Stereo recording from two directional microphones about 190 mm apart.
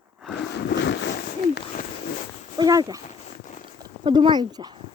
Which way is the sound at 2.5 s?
20° right (ahead or behind).